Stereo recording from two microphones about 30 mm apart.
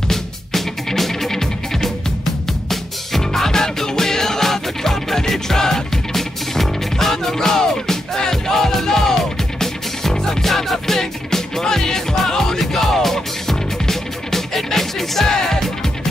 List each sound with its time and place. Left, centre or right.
0.1 s music: centre
2.7 s music: centre
10.4 s music: centre